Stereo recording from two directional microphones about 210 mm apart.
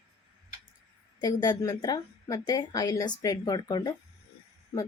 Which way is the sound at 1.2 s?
20° left (ahead or behind).